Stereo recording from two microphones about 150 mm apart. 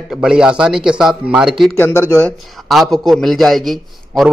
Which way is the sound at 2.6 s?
Centre (ahead or behind).